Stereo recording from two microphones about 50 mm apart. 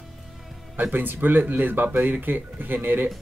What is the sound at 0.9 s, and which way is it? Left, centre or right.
Speech, right.